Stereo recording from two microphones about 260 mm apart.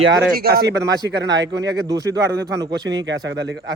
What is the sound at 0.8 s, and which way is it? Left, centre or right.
Speech, centre.